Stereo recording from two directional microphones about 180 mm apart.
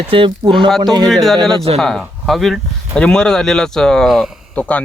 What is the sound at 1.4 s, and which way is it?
Speech, 30° right (ahead or behind).